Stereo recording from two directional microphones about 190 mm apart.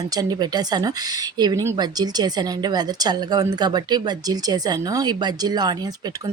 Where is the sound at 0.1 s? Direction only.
20° right (ahead or behind).